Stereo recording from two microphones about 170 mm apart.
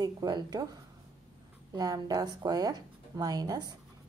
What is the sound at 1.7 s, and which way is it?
A woman's voice, 20° right (ahead or behind).